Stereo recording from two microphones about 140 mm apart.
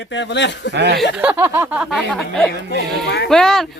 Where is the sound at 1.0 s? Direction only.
10° right (ahead or behind).